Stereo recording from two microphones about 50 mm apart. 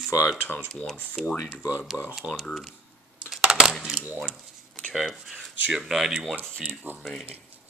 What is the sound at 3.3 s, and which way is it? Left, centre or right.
Coin, centre.